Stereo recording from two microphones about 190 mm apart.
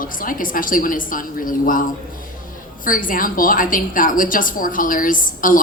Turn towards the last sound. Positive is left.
turn(degrees=45)  # may be behind; listen again after turning